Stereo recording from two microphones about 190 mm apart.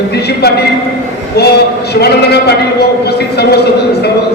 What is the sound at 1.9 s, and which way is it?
A man's voice, 60° left (ahead or behind).